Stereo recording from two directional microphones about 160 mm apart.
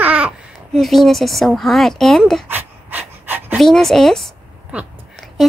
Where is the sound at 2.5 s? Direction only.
10° right (ahead or behind).